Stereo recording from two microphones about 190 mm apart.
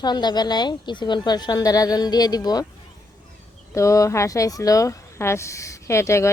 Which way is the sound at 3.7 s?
15° left (ahead or behind).